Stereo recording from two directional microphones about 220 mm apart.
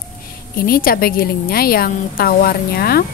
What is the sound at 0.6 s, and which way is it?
A woman's voice, 40° left (ahead or behind).